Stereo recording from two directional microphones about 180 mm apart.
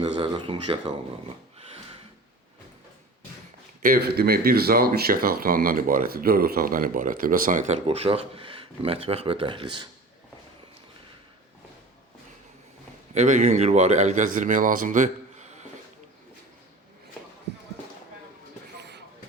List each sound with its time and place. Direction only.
0.0 s speech: 30° right (ahead or behind)
3.8 s speech: 60° right (ahead or behind); by 9.9 s 25° right (ahead or behind)
13.1 s speech: 40° right (ahead or behind)
18.8 s a sound: 70° right (ahead or behind)